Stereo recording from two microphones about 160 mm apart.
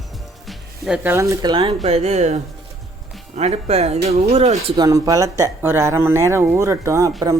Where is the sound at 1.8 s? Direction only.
40° right (ahead or behind).